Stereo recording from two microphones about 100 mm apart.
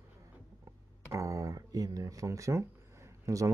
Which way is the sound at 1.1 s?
30° right (ahead or behind).